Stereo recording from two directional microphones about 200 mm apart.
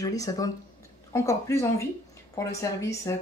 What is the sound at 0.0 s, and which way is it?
A woman's voice, 15° left (ahead or behind).